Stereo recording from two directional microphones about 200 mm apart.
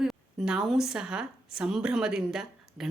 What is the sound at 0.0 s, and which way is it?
A woman's voice, centre (ahead or behind).